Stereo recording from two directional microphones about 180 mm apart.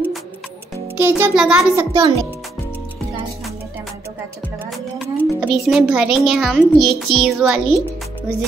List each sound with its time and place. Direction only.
0.9 s a child's voice: 10° right (ahead or behind)
1.8 s a child's voice: 20° right (ahead or behind)
4.9 s a child's voice: 5° right (ahead or behind)